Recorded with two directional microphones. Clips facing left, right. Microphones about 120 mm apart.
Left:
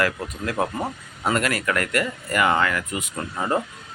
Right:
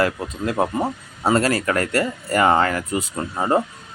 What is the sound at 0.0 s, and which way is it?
Speech, 25° right (ahead or behind).